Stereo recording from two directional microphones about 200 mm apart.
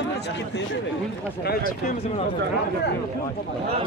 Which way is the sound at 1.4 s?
50° left (ahead or behind).